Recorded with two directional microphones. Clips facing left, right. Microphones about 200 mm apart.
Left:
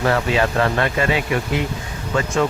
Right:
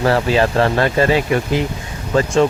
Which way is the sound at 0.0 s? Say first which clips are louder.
Right 3 dB; 35° right (ahead or behind).